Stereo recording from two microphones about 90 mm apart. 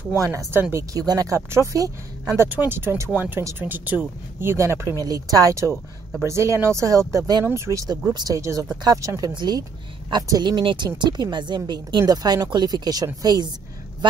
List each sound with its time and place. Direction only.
0.1 s speech: 35° right (ahead or behind)
2.4 s speech: 20° right (ahead or behind)
8.1 s speech: 45° right (ahead or behind)
9.3 s a woman's voice: 55° right (ahead or behind)
11.0 s a woman's voice: 55° right (ahead or behind)